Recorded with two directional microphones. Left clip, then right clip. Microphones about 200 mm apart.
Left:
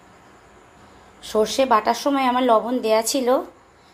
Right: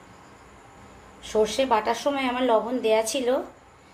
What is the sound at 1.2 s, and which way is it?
Speech, 35° left (ahead or behind).